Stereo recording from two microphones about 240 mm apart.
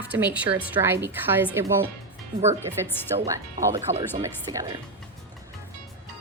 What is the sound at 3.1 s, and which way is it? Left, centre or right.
A woman's voice, right.